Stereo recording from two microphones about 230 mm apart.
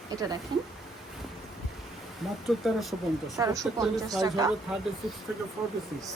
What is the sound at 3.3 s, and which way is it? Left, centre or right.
Speech, centre.